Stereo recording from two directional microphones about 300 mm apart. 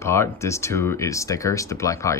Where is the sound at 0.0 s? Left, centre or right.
Centre.